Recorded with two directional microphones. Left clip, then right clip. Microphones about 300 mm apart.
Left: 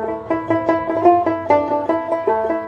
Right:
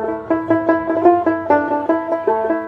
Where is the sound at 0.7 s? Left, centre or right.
Centre.